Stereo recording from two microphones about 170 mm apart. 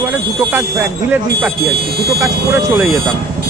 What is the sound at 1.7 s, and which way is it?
Speech, 65° right (ahead or behind).